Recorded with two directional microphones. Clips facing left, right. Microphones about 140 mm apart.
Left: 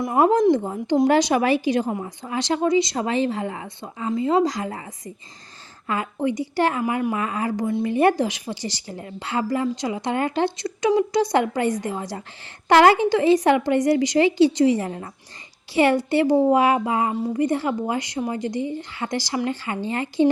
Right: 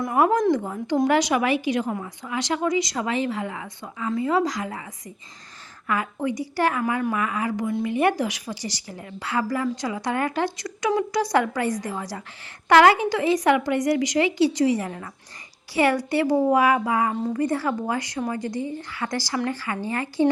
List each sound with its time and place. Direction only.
0.0 s a woman's voice: 25° left (ahead or behind)